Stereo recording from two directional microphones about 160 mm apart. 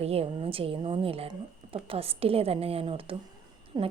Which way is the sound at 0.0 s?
40° right (ahead or behind).